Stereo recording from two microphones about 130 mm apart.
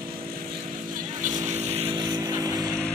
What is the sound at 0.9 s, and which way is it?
Vehicle, 75° right (ahead or behind).